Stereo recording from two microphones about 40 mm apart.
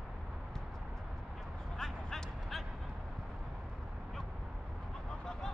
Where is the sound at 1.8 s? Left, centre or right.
Centre.